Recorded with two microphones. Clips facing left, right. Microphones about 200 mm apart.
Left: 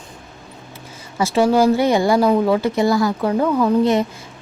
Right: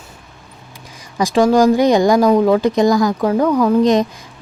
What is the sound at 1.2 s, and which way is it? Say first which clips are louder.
A woman's voice: right 3 dB; 15° right (ahead or behind).